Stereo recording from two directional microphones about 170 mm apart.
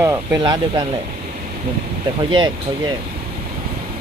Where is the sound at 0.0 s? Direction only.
20° right (ahead or behind).